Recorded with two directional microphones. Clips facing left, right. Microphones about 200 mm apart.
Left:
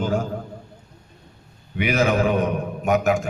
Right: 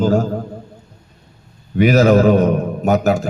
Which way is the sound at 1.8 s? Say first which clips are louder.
Right 9 dB; 40° right (ahead or behind).